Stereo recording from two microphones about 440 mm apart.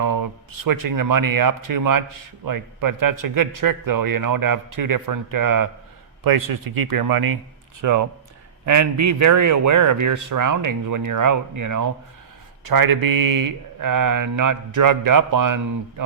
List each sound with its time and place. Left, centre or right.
0.0 s a man's voice: right